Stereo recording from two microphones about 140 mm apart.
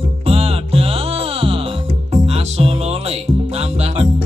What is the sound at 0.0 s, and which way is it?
Music, 45° right (ahead or behind).